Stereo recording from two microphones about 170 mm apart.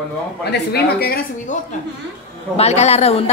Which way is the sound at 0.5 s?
65° left (ahead or behind).